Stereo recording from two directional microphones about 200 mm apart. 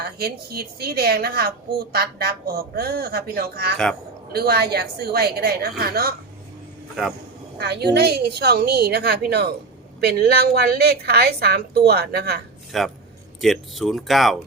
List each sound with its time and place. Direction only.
0.0 s a woman's voice: 50° right (ahead or behind)
7.6 s a woman's voice: 55° right (ahead or behind)
12.7 s speech: centre (ahead or behind)